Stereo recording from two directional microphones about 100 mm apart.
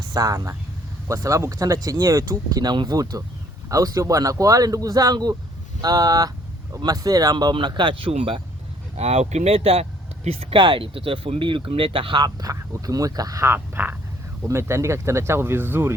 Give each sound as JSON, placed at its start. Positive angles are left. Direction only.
{"t": 0.1, "sound": "speech", "side_deg": -40}
{"t": 7.7, "sound": "speech", "side_deg": -55}
{"t": 9.0, "sound": "speech", "side_deg": -90}
{"t": 10.2, "sound": "speech", "side_deg": -65}
{"t": 12.2, "sound": "speech", "side_deg": -35}